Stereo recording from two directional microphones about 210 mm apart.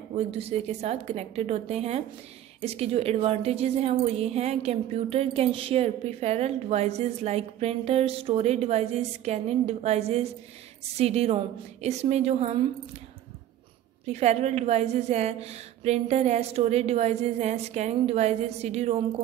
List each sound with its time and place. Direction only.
0.1 s a woman's voice: 30° right (ahead or behind)
14.0 s a woman's voice: 30° right (ahead or behind)